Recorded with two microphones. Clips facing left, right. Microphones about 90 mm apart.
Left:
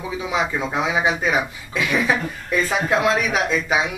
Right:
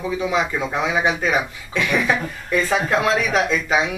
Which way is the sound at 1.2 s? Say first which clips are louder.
Even; 10° left (ahead or behind).